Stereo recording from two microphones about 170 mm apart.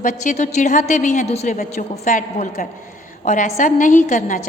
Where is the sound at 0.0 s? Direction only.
50° left (ahead or behind).